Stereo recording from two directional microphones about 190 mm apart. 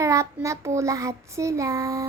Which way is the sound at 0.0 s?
15° right (ahead or behind).